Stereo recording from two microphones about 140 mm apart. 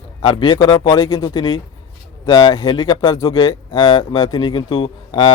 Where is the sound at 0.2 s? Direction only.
35° left (ahead or behind).